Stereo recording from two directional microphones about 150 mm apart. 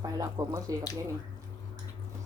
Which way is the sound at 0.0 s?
25° right (ahead or behind).